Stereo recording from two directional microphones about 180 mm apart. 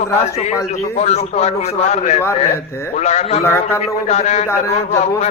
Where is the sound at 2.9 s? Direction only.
40° left (ahead or behind).